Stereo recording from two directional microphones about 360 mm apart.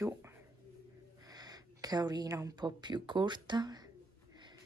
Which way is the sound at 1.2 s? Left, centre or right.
Centre.